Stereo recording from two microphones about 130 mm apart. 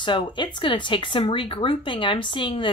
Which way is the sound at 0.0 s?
40° left (ahead or behind).